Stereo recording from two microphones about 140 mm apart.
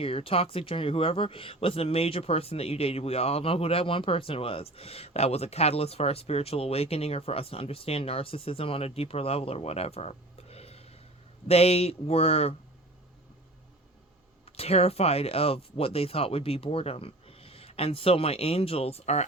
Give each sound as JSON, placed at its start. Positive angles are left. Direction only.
{"t": 0.0, "sound": "speech", "side_deg": 40}
{"t": 14.5, "sound": "speech", "side_deg": 45}